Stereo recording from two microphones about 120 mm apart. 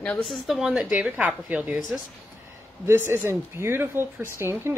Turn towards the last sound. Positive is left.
turn(degrees=-20)  # may be behind; listen again after turning